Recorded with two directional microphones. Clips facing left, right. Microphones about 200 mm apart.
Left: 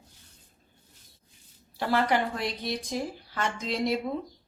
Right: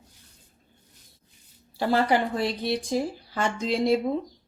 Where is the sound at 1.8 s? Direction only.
30° right (ahead or behind).